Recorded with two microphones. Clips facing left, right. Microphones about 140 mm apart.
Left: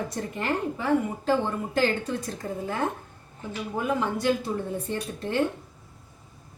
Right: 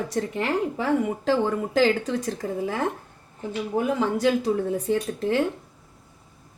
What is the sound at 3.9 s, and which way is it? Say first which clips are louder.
A woman's voice: right 2 dB; 90° right.